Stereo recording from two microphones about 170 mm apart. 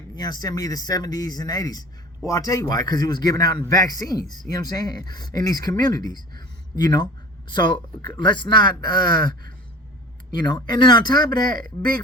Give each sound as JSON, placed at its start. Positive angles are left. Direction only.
{"t": 0.2, "sound": "a man's voice", "side_deg": 25}
{"t": 11.3, "sound": "speech", "side_deg": -60}